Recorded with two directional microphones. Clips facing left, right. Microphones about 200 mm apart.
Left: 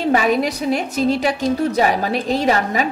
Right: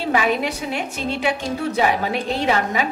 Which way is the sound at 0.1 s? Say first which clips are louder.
Left 2 dB; 40° left (ahead or behind).